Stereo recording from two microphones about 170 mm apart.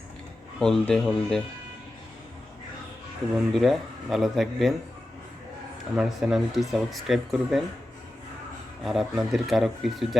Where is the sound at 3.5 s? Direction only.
Centre (ahead or behind).